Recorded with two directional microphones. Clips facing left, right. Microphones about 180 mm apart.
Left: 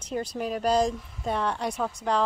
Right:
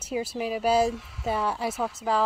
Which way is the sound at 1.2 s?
5° right (ahead or behind).